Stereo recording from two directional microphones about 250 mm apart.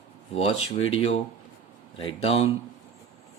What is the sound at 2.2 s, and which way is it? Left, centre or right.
Speech, left.